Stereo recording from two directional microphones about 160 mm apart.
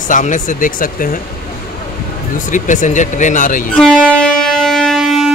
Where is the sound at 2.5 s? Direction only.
55° left (ahead or behind).